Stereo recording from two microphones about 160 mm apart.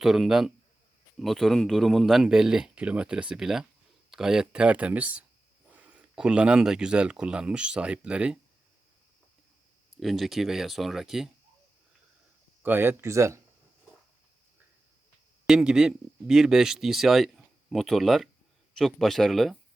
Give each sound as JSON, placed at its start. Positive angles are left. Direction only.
{"t": 0.0, "sound": "speech", "side_deg": 0}
{"t": 10.0, "sound": "speech", "side_deg": 0}
{"t": 12.6, "sound": "speech", "side_deg": -15}
{"t": 15.4, "sound": "speech", "side_deg": -5}